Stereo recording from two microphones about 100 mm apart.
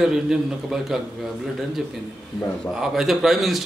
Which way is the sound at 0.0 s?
5° right (ahead or behind).